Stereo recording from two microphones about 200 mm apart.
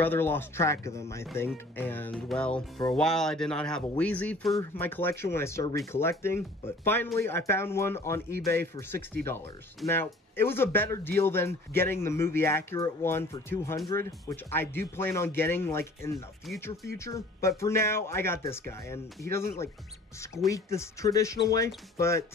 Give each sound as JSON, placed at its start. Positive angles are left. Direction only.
{"t": 0.0, "sound": "speech", "side_deg": 10}
{"t": 20.2, "sound": "speech", "side_deg": 15}